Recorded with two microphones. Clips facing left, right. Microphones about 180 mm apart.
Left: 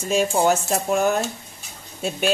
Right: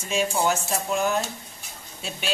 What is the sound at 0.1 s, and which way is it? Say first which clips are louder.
Speech: left 5 dB; 45° left (ahead or behind).